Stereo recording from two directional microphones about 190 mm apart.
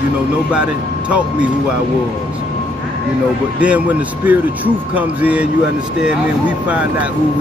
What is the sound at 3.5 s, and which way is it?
Speech, 5° right (ahead or behind).